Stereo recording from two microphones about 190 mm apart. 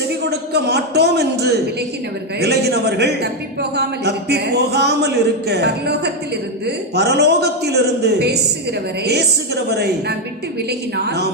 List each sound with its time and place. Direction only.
0.3 s a man's voice: 60° right (ahead or behind)
9.6 s a man's voice: 60° right (ahead or behind)